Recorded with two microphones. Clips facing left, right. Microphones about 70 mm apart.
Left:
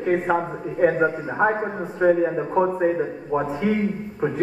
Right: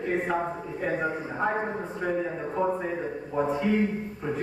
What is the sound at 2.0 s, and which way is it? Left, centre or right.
Speech, left.